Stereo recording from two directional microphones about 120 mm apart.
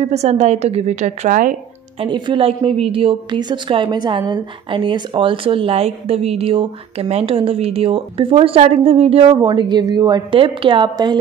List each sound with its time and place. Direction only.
0.0 s a woman's voice: 65° right (ahead or behind); by 1.5 s 85° right
2.0 s a woman's voice: 40° right (ahead or behind)